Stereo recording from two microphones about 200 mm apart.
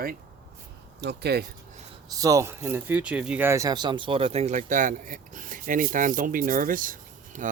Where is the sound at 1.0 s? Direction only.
55° right (ahead or behind).